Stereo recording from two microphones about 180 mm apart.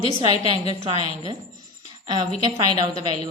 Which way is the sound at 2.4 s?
20° right (ahead or behind).